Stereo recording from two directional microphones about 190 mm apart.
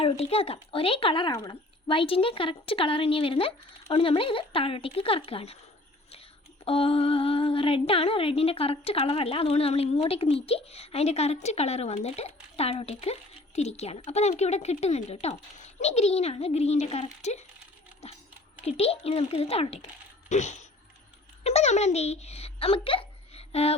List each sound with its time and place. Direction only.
0.0 s speech: 30° left (ahead or behind)
6.7 s speech: 30° left (ahead or behind)
18.0 s a sound: 35° left (ahead or behind)
18.6 s speech: 30° left (ahead or behind)